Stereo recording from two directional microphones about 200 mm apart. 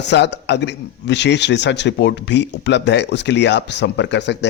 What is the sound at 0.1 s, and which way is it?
A man's voice, 60° left (ahead or behind).